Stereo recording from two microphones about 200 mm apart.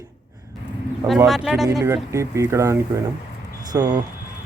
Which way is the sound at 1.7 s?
15° right (ahead or behind).